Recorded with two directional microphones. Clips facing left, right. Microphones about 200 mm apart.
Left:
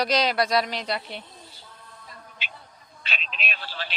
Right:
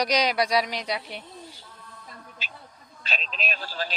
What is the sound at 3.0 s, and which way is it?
Speech, 40° right (ahead or behind).